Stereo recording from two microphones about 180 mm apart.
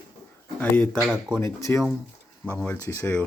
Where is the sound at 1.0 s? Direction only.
5° right (ahead or behind).